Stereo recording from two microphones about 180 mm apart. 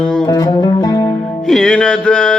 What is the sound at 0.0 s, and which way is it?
Music, 5° left (ahead or behind).